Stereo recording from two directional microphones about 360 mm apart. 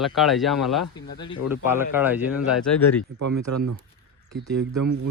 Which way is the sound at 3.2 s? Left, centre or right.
Right.